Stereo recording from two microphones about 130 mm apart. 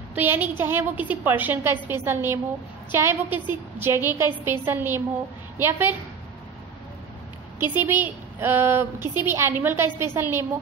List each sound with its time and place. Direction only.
0.1 s a woman's voice: 15° right (ahead or behind)
7.6 s a woman's voice: 15° right (ahead or behind)